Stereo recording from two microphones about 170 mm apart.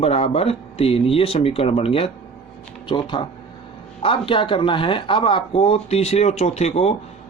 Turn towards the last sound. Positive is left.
turn(degrees=40)  # may be behind; listen again after turning